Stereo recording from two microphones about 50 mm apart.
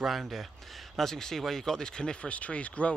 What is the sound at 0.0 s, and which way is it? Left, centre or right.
Speech, centre.